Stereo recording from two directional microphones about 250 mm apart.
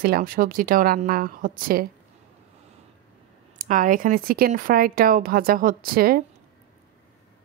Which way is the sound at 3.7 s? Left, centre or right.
Right.